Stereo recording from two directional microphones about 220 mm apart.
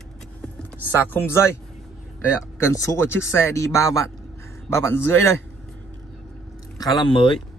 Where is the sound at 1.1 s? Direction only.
10° left (ahead or behind).